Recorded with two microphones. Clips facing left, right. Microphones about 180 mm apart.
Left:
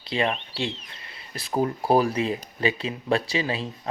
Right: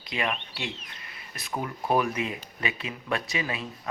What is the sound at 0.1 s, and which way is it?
Speech, 30° left (ahead or behind).